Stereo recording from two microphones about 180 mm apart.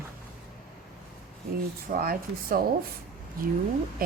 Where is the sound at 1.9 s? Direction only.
55° right (ahead or behind).